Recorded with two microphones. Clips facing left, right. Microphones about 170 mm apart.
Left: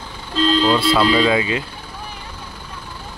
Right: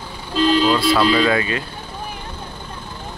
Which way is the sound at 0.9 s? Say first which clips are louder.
Left 1 dB; 20° left (ahead or behind).